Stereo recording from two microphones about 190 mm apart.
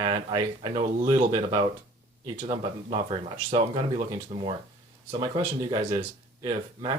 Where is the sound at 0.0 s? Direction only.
25° right (ahead or behind).